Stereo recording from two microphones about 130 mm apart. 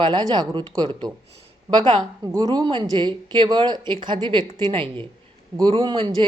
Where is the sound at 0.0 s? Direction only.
35° right (ahead or behind).